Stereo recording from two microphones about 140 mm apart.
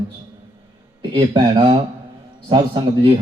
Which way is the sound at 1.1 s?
35° right (ahead or behind).